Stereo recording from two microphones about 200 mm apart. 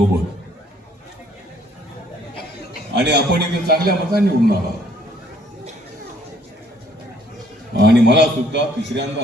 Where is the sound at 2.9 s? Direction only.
55° right (ahead or behind).